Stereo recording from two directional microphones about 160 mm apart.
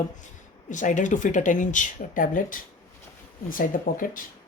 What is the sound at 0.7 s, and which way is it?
Speech, 50° left (ahead or behind).